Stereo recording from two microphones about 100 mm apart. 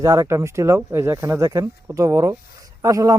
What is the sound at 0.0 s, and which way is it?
A man's voice, 35° right (ahead or behind).